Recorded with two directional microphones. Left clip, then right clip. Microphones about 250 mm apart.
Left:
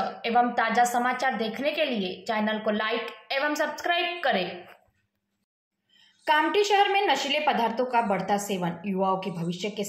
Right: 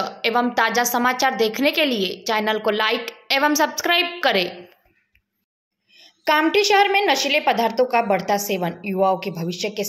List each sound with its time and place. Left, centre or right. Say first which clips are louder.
0.2 s a woman's voice: right 5 dB; right
5.9 s a woman's voice: right 5 dB; right